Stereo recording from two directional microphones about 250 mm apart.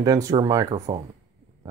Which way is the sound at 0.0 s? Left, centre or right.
Centre.